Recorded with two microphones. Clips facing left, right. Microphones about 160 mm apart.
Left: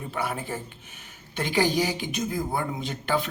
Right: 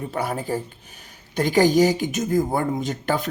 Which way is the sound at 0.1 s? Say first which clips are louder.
Right 4 dB; 40° right (ahead or behind).